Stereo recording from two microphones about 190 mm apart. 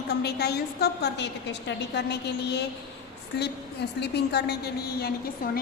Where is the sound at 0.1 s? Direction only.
60° left (ahead or behind).